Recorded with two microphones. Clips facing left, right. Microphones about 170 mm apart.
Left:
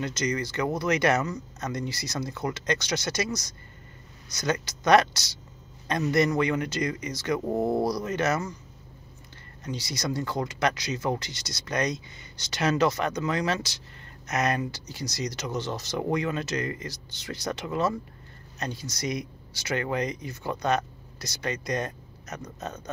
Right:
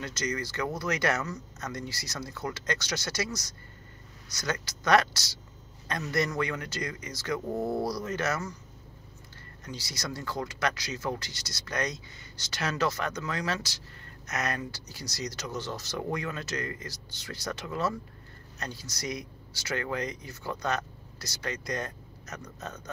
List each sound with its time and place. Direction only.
0.0 s speech: 20° left (ahead or behind)
9.6 s speech: 20° left (ahead or behind)